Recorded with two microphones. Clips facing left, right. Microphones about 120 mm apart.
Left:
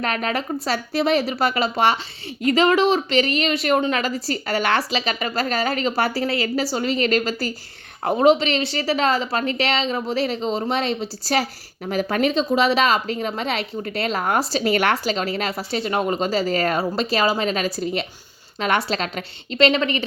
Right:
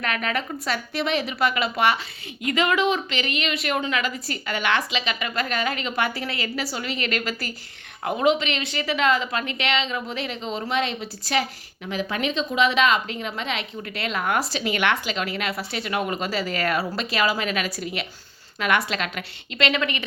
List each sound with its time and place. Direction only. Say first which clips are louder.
0.0 s a woman's voice: left 3 dB; 35° left (ahead or behind)